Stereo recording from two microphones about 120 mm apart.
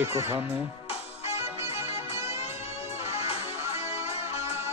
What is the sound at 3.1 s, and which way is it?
Music, 55° left (ahead or behind).